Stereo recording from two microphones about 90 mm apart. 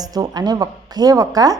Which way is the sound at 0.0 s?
45° right (ahead or behind).